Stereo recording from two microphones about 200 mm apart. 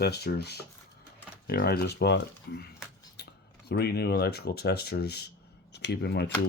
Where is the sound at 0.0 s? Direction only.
55° left (ahead or behind).